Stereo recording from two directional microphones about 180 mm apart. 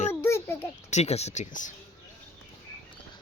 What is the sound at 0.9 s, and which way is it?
Speech, 35° left (ahead or behind).